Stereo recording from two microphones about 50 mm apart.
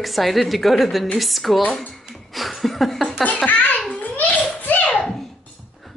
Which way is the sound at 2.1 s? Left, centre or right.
Centre.